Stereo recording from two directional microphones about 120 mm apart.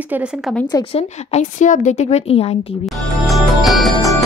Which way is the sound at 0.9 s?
70° left (ahead or behind).